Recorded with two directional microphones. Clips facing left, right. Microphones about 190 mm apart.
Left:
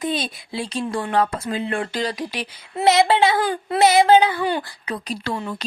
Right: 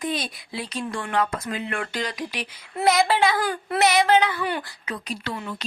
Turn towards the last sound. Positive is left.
turn(degrees=35)  # may be behind; listen again after turning